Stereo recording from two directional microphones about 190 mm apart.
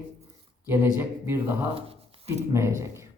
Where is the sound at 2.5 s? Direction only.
15° right (ahead or behind).